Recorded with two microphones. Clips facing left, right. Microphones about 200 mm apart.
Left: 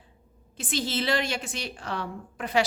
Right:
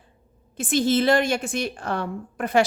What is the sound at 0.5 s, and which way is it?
A woman's voice, 50° right (ahead or behind).